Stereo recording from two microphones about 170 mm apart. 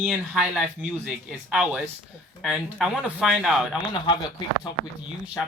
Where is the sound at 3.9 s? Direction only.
25° left (ahead or behind).